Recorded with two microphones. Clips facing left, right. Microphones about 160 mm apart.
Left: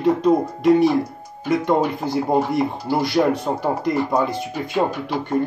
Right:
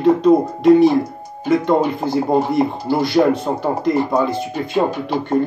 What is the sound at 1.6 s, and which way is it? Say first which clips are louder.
Speech: right 3 dB; 15° left (ahead or behind).